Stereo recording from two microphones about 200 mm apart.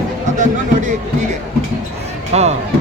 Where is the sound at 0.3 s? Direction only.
40° right (ahead or behind).